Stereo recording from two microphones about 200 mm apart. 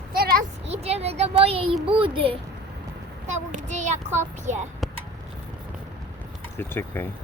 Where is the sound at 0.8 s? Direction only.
30° right (ahead or behind).